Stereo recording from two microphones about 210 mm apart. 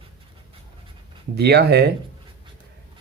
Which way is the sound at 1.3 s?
50° right (ahead or behind).